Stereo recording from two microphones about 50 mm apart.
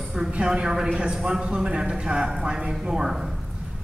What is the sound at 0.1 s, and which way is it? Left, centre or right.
A woman's voice, centre.